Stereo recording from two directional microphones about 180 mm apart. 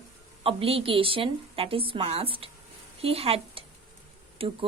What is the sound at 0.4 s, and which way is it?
A woman's voice, 30° right (ahead or behind).